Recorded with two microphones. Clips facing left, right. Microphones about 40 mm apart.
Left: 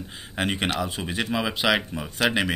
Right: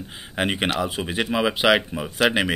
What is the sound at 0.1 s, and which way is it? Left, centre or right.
Speech, centre.